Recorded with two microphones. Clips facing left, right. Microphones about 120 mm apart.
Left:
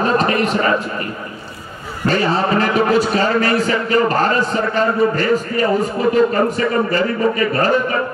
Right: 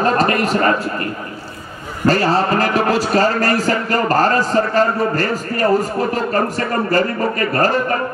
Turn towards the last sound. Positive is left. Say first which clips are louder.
# even
turn(degrees=-40)  # may be behind; listen again after turning